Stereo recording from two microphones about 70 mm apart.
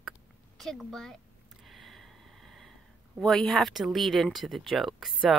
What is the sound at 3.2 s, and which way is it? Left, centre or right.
Speech, centre.